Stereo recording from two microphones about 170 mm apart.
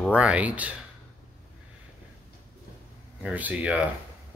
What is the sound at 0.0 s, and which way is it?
Speech, 5° right (ahead or behind).